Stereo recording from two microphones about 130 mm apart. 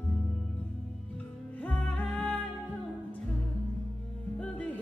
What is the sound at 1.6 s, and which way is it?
Music, 10° left (ahead or behind).